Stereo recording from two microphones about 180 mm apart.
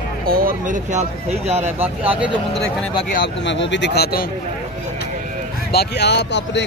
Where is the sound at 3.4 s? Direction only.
80° left; by 4.3 s 60° left (ahead or behind).